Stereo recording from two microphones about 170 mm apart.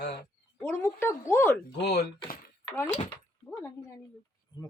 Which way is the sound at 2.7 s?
10° left (ahead or behind).